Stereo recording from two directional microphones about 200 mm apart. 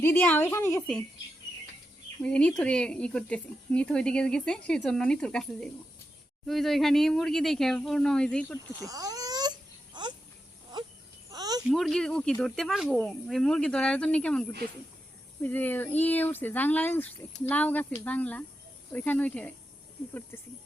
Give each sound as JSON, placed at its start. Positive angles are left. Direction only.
{"t": 0.0, "sound": "speech", "side_deg": 10}
{"t": 2.2, "sound": "speech", "side_deg": 5}
{"t": 8.8, "sound": "a sound", "side_deg": -15}
{"t": 11.3, "sound": "cricket", "side_deg": -20}
{"t": 11.7, "sound": "speech", "side_deg": 0}